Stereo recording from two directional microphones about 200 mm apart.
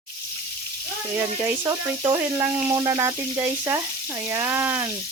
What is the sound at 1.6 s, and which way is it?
Speech, 20° right (ahead or behind).